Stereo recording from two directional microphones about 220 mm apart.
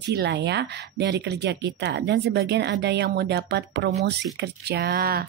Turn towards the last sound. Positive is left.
turn(degrees=-45)  # may be behind; listen again after turning